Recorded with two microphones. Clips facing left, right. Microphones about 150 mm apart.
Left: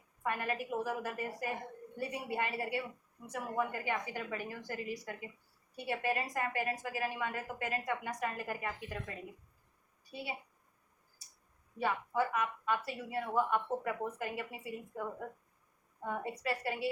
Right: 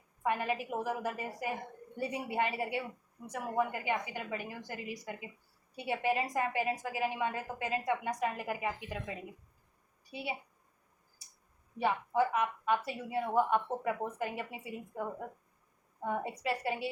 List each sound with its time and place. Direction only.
0.2 s a woman's voice: 15° right (ahead or behind)
11.8 s a woman's voice: 20° right (ahead or behind)
16.0 s a woman's voice: 20° right (ahead or behind)